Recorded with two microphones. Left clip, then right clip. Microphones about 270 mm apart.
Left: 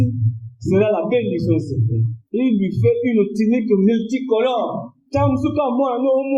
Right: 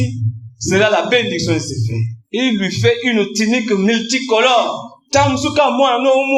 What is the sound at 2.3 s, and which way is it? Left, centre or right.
Speech, right.